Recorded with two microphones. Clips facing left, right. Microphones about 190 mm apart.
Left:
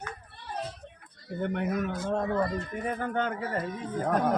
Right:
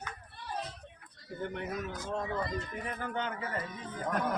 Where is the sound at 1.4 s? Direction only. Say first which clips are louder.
Left 7 dB; 60° left (ahead or behind).